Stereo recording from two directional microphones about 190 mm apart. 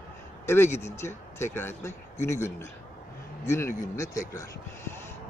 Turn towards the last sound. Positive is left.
turn(degrees=15)  # may be behind; listen again after turning